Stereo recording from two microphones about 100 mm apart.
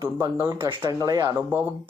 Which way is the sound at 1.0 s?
30° right (ahead or behind).